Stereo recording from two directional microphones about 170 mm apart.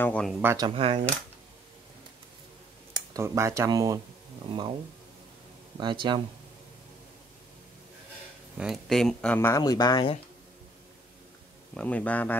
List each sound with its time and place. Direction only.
0.0 s speech: 5° left (ahead or behind)
0.6 s speech: 30° right (ahead or behind)
3.1 s speech: 15° right (ahead or behind)
5.8 s speech: 25° right (ahead or behind)
8.5 s speech: centre (ahead or behind)
9.6 s speech: 25° left (ahead or behind)
11.7 s speech: 10° left (ahead or behind)